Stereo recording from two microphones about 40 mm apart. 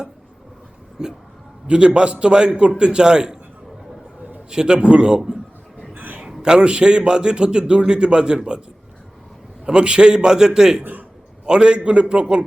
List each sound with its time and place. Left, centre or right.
1.0 s a man's voice: centre
4.5 s a man's voice: right
5.9 s a sound: right
6.4 s a man's voice: right
9.6 s a man's voice: right